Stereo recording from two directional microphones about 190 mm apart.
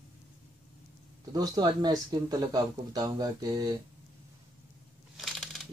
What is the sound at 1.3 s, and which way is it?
Speech, 20° right (ahead or behind).